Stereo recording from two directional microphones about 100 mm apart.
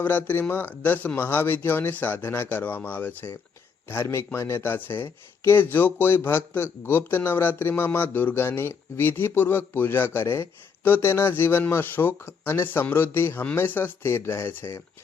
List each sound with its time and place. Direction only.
0.0 s speech: 20° left (ahead or behind)